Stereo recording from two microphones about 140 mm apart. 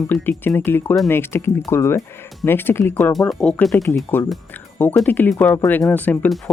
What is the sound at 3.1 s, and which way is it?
Speech, 5° left (ahead or behind).